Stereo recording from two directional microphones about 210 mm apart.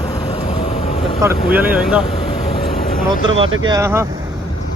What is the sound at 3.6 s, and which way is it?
Speech, 15° right (ahead or behind).